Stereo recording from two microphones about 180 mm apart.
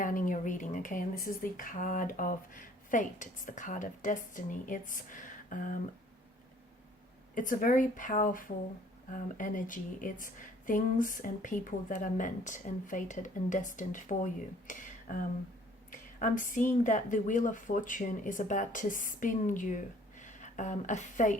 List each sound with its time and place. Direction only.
0.0 s a woman's voice: 50° left (ahead or behind)
7.3 s a woman's voice: 50° left (ahead or behind)
14.7 s a sound: 45° left (ahead or behind)
15.9 s a woman's voice: 45° left (ahead or behind)